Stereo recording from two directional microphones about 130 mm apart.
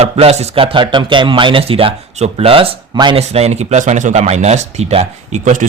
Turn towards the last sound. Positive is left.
turn(degrees=-75)  # may be behind; listen again after turning